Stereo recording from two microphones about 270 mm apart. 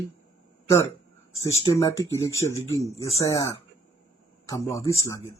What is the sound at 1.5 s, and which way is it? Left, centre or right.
Speech, left.